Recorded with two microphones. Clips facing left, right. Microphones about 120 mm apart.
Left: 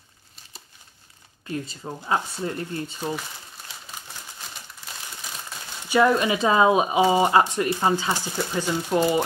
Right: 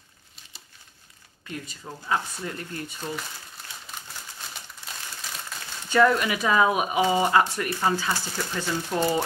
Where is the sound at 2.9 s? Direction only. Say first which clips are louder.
Left 4 dB; 10° left (ahead or behind).